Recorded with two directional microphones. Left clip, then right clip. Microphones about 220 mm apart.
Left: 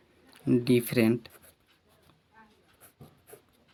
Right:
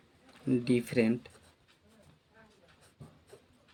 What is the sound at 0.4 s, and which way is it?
Speech, 45° left (ahead or behind).